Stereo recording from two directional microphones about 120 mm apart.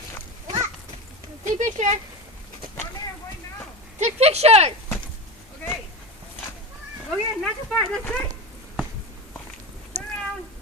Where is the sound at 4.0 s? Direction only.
60° right (ahead or behind).